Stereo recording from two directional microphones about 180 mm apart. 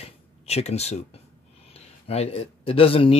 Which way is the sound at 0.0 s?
35° left (ahead or behind).